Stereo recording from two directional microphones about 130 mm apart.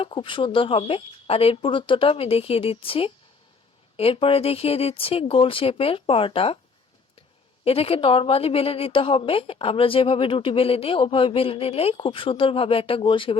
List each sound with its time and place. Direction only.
0.0 s speech: 40° left (ahead or behind)